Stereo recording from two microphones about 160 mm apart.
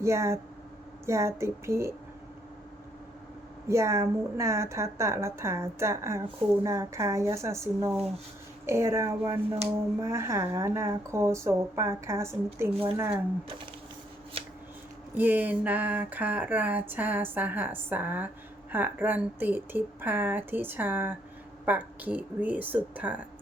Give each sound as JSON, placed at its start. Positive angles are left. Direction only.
{"t": 0.0, "sound": "a woman's voice", "side_deg": -15}
{"t": 3.7, "sound": "a woman's voice", "side_deg": -15}
{"t": 15.1, "sound": "a woman's voice", "side_deg": -10}